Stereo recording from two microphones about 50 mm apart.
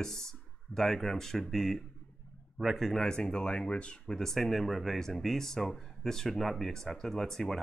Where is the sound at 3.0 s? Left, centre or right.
Centre.